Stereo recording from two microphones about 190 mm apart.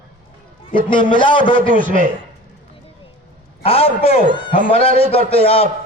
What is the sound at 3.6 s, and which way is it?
A man's voice, 30° left (ahead or behind).